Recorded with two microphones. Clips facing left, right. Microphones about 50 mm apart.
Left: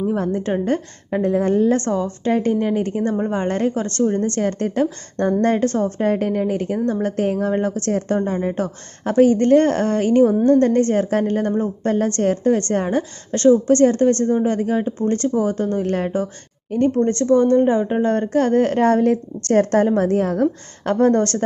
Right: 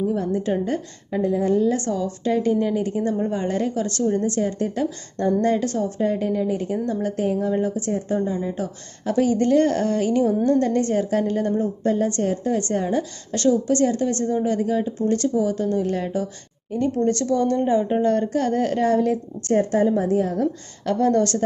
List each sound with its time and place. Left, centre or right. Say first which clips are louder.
0.0 s a woman's voice: left 2 dB; left
19.5 s a woman's voice: left 3 dB; left